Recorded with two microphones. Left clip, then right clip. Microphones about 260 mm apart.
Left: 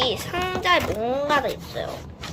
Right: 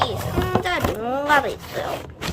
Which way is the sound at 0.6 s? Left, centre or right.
Centre.